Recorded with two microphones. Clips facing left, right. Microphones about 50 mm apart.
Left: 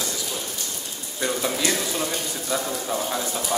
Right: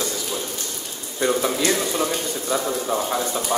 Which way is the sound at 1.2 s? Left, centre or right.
Centre.